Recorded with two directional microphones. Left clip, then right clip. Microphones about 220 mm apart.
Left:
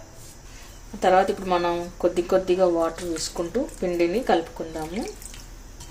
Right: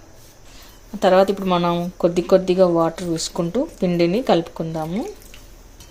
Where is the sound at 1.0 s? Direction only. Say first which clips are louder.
Right 4 dB; 40° right (ahead or behind).